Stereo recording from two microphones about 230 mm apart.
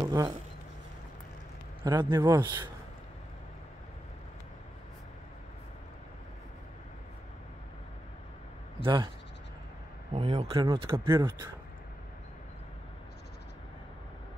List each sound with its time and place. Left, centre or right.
0.0 s speech: centre
1.8 s a man's voice: centre
8.7 s speech: right
10.1 s a man's voice: right